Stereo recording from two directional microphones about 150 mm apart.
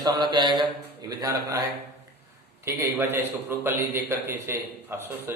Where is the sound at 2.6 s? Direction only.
15° right (ahead or behind).